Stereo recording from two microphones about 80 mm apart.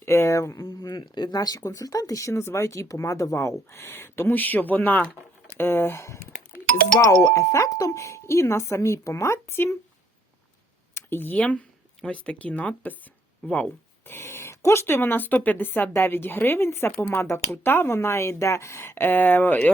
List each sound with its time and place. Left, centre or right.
0.0 s speech: left
0.9 s speech: left
10.9 s speech: left
13.4 s a sound: centre
14.1 s speech: left